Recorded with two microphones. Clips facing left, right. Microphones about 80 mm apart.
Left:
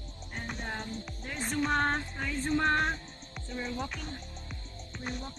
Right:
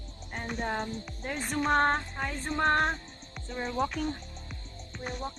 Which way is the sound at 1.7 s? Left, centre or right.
Right.